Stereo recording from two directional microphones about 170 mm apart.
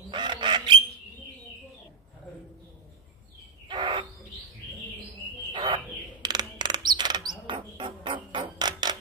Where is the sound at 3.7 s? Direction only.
30° right (ahead or behind).